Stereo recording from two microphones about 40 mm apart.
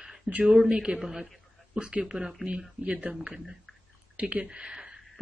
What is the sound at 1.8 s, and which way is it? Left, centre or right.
Speech, right.